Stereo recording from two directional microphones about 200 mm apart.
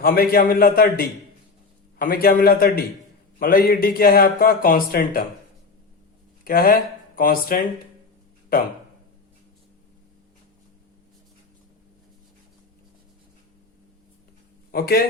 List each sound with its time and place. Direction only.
0.0 s a man's voice: 50° left (ahead or behind)
6.4 s a man's voice: 45° left (ahead or behind)
14.7 s a man's voice: 50° left (ahead or behind)